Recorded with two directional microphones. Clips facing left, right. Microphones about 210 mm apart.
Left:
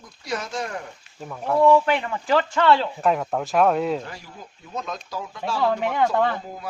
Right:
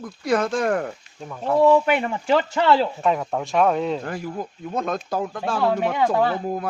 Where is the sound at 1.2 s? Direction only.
5° left (ahead or behind).